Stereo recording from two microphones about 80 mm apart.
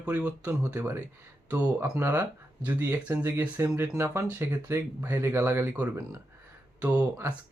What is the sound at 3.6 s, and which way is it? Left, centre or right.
Speech, right.